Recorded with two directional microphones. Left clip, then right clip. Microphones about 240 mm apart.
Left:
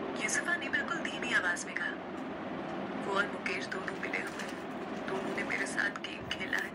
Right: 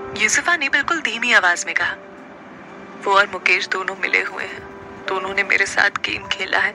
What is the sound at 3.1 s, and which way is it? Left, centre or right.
A woman's voice, right.